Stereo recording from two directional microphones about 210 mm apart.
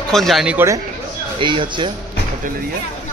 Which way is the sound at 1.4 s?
25° right (ahead or behind).